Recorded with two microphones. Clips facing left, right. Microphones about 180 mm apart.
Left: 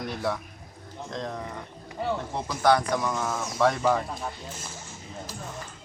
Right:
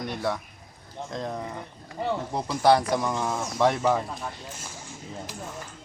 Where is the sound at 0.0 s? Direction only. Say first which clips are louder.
Right 1 dB; centre (ahead or behind).